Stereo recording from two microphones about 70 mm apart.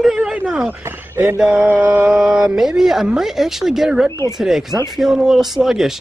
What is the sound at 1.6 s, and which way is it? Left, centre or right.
Mantra, right.